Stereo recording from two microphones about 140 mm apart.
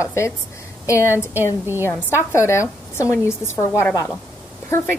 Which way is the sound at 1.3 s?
15° right (ahead or behind).